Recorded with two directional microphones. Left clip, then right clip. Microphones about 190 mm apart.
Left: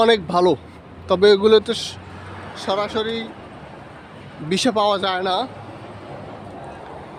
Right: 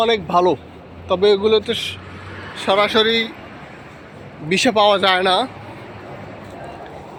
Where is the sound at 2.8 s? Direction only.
20° right (ahead or behind).